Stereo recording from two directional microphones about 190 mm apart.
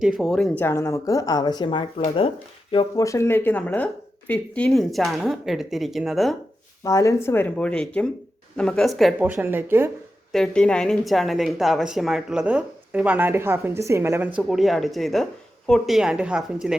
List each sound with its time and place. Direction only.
0.0 s a woman's voice: centre (ahead or behind)
6.8 s a woman's voice: 15° left (ahead or behind); by 9.9 s 10° right (ahead or behind)
10.3 s a woman's voice: 5° left (ahead or behind)